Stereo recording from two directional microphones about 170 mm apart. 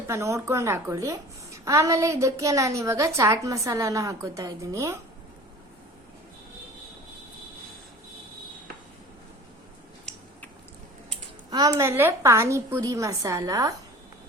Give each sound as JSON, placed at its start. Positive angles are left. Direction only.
{"t": 0.1, "sound": "a woman's voice", "side_deg": -15}
{"t": 11.5, "sound": "a woman's voice", "side_deg": -20}